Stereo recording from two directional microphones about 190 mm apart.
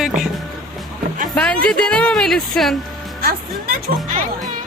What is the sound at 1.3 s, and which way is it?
Speech, 5° left (ahead or behind).